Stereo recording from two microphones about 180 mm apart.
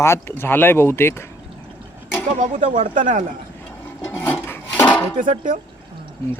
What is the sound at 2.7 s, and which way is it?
Speech, 45° right (ahead or behind).